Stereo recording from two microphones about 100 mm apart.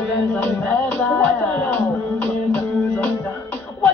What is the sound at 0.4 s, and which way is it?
Music, 15° left (ahead or behind).